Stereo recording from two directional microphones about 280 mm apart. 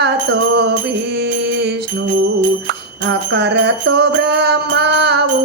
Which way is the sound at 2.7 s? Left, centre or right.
Right.